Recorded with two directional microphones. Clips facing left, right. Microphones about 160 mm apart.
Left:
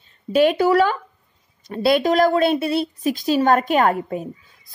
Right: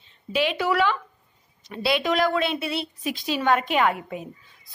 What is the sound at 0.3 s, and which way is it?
A woman's voice, 45° left (ahead or behind).